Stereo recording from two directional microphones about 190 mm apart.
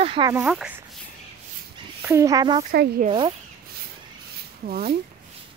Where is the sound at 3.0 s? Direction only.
25° right (ahead or behind).